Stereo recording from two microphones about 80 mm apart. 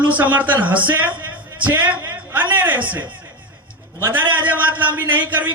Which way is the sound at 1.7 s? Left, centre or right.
Right.